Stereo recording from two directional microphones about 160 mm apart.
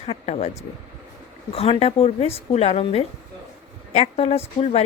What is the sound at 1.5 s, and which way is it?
Speech, 40° left (ahead or behind).